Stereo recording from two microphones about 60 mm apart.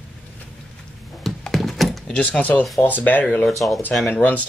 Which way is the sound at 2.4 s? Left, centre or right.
Left.